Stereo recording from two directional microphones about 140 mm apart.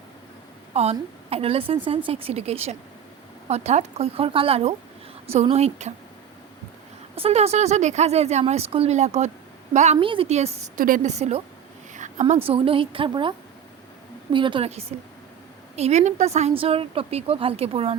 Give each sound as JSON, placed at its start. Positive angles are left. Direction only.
{"t": 0.7, "sound": "a woman's voice", "side_deg": -50}
{"t": 7.2, "sound": "a woman's voice", "side_deg": -50}
{"t": 10.0, "sound": "a woman's voice", "side_deg": -40}
{"t": 10.8, "sound": "a woman's voice", "side_deg": -75}
{"t": 11.1, "sound": "a woman's voice", "side_deg": -50}
{"t": 11.9, "sound": "a sound", "side_deg": -60}
{"t": 12.2, "sound": "a woman's voice", "side_deg": -45}
{"t": 14.3, "sound": "a woman's voice", "side_deg": -35}
{"t": 14.7, "sound": "a woman's voice", "side_deg": -45}